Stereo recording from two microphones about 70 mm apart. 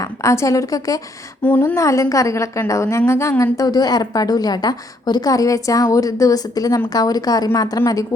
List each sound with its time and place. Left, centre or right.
0.0 s a woman's voice: left
1.4 s speech: left
1.7 s a woman's voice: left